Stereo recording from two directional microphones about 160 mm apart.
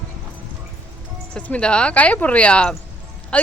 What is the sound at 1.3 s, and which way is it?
Speech, 5° left (ahead or behind).